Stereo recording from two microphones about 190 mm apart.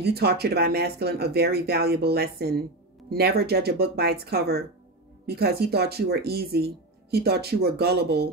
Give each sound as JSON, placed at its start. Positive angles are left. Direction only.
{"t": 0.0, "sound": "speech", "side_deg": -55}